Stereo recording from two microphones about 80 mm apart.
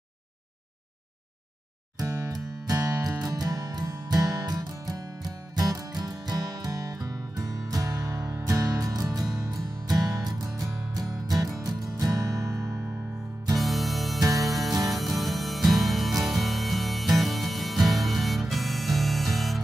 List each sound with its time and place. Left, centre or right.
2.0 s music: right
2.3 s music: right
13.6 s music: centre